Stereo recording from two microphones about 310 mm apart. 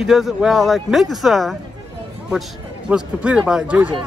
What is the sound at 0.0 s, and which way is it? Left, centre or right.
Speech, centre.